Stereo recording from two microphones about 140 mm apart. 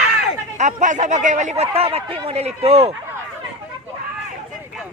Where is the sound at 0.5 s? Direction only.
60° right (ahead or behind).